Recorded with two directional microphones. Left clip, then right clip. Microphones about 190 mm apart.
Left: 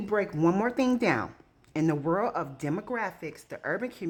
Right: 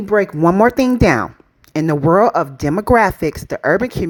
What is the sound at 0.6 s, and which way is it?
Speech, 40° right (ahead or behind).